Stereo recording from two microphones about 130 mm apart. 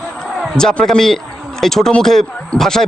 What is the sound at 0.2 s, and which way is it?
Speech, 5° left (ahead or behind).